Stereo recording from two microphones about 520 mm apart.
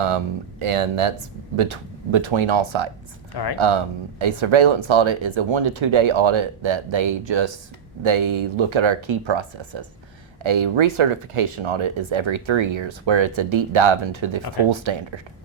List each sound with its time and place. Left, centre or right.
0.6 s speech: right